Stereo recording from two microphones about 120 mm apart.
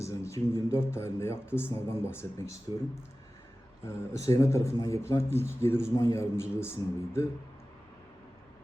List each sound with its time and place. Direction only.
0.0 s speech: 25° left (ahead or behind)
3.8 s speech: 25° left (ahead or behind)